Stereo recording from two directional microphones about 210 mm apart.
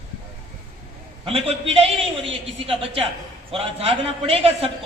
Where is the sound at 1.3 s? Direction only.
25° right (ahead or behind).